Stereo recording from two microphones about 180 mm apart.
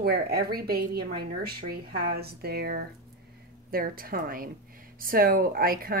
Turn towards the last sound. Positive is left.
turn(degrees=-55)  # may be behind; listen again after turning